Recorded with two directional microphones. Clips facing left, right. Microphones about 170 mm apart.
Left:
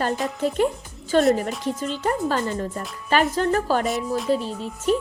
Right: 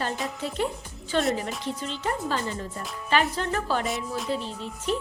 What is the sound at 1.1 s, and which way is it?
Speech, 45° left (ahead or behind).